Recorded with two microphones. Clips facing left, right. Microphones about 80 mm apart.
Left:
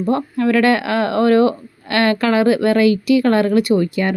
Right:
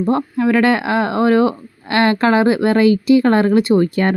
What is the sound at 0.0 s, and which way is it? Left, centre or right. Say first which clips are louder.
Speech: right 1 dB; right.